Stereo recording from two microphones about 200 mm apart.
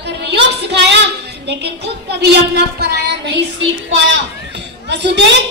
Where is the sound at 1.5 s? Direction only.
55° right (ahead or behind).